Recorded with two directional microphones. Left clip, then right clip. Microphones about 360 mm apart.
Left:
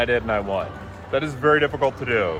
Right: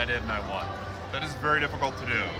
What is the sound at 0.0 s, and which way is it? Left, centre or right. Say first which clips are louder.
Speech: left 8 dB; centre.